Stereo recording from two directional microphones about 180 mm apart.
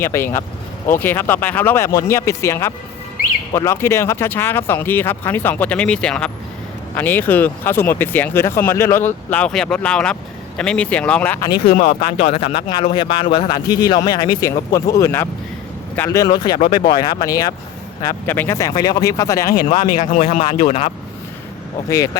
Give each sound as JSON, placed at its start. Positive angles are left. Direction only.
{"t": 0.0, "sound": "speech", "side_deg": 15}
{"t": 11.5, "sound": "speech", "side_deg": 60}
{"t": 11.9, "sound": "speech", "side_deg": 35}
{"t": 19.9, "sound": "speech", "side_deg": 45}
{"t": 21.8, "sound": "speech", "side_deg": 20}